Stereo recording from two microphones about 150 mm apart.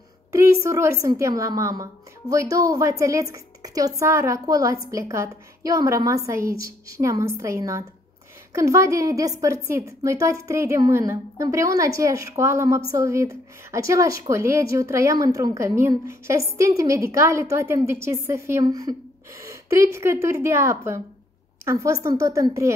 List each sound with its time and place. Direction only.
0.3 s a woman's voice: 20° right (ahead or behind)